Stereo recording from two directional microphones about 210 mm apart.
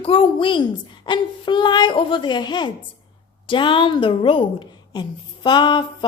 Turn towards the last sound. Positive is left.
turn(degrees=20)  # may be behind; listen again after turning